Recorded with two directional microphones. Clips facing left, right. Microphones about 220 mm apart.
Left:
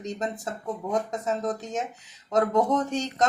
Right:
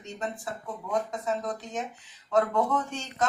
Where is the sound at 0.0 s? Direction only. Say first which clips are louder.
Left 4 dB; 40° left (ahead or behind).